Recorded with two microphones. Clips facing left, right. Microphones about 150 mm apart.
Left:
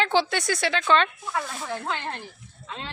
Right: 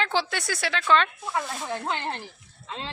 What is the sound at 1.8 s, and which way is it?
Speech, 30° right (ahead or behind).